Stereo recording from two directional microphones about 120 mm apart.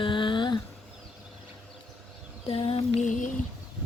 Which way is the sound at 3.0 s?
90° left.